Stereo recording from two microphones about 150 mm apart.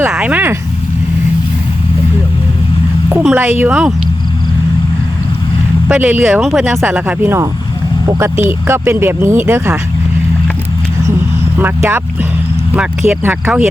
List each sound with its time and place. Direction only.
0.1 s speech: 5° right (ahead or behind)
3.2 s speech: 5° right (ahead or behind)
5.9 s speech: 10° right (ahead or behind)
11.5 s speech: 15° right (ahead or behind)
12.7 s speech: 5° right (ahead or behind)